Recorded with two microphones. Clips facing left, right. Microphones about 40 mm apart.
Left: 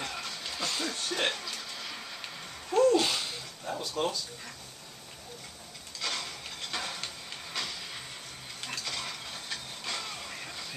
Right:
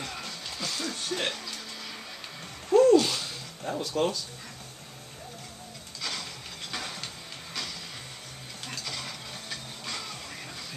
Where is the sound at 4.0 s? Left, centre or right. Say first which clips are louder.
Right 4 dB; right.